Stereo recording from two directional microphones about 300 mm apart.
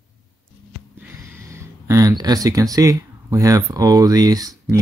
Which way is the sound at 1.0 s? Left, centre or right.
Centre.